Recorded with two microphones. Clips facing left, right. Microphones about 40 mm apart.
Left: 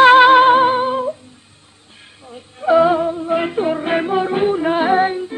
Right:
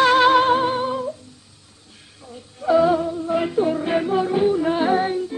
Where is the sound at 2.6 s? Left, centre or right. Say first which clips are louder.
Left 4 dB; left.